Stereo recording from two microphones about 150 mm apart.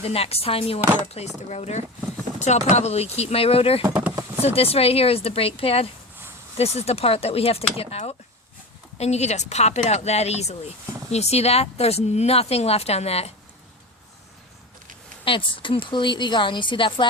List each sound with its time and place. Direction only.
0.0 s a woman's voice: 40° left (ahead or behind)
15.2 s a woman's voice: 35° left (ahead or behind)